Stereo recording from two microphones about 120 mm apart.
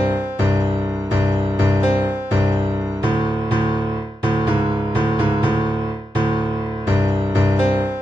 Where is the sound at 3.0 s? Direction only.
40° right (ahead or behind).